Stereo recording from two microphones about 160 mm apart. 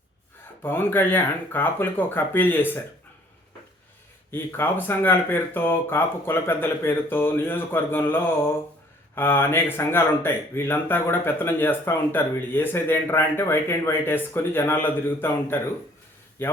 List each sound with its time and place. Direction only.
0.6 s speech: 15° left (ahead or behind)
4.3 s speech: 15° left (ahead or behind)